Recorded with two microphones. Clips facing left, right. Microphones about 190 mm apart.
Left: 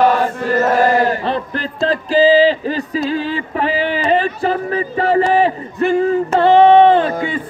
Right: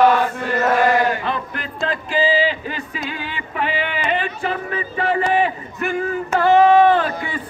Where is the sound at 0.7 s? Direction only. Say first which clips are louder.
Left 3 dB; 35° left (ahead or behind).